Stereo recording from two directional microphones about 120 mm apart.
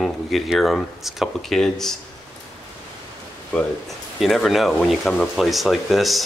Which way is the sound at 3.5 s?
5° left (ahead or behind).